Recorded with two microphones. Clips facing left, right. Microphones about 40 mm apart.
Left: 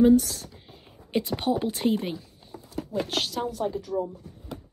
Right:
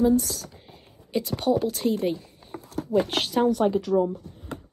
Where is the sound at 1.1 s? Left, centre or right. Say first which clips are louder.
Right 2 dB; left.